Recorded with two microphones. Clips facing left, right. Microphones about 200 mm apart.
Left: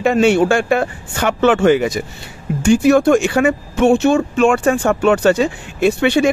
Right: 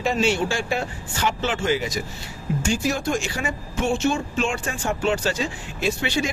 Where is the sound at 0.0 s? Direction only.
60° left (ahead or behind).